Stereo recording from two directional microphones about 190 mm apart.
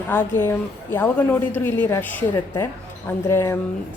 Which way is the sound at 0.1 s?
10° left (ahead or behind).